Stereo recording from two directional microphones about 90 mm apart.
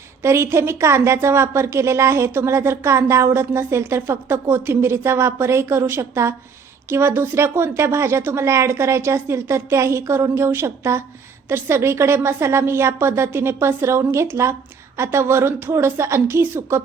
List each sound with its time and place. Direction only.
0.2 s a woman's voice: 30° right (ahead or behind)